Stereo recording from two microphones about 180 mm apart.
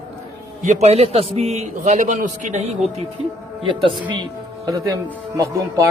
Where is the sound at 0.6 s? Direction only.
40° right (ahead or behind).